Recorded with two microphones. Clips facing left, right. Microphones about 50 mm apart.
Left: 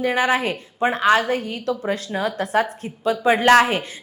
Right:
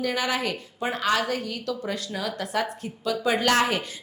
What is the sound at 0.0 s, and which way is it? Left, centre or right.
A woman's voice, left.